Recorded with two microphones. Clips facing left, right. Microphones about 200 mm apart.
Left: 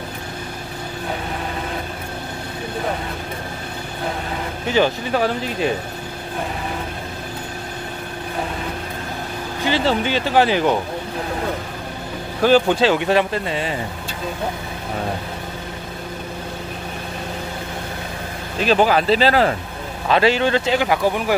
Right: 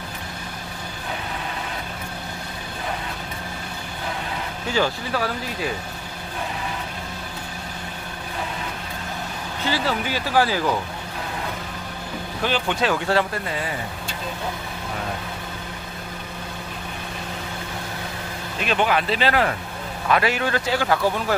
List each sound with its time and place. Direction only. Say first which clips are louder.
4.6 s speech: left 5 dB; 20° left (ahead or behind)
9.7 s speech: left 5 dB; 25° left (ahead or behind)
12.4 s speech: left 10 dB; 40° left (ahead or behind)
12.8 s speech: left 5 dB; 20° left (ahead or behind)
18.6 s speech: left 6 dB; 35° left (ahead or behind); by 21.4 s 15° left (ahead or behind)